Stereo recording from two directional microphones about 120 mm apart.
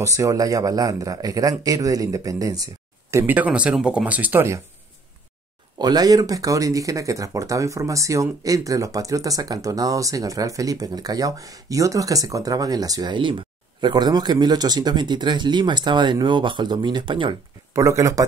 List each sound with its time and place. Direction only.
0.0 s speech: 25° right (ahead or behind)
5.8 s speech: 35° right (ahead or behind)
17.7 s speech: 25° right (ahead or behind)